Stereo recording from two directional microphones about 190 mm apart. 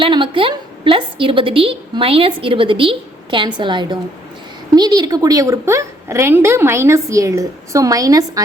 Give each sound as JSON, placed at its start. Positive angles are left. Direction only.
{"t": 0.0, "sound": "a woman's voice", "side_deg": -25}